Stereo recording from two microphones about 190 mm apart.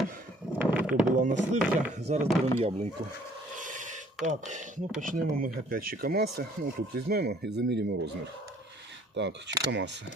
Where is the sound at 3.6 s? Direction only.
40° right (ahead or behind).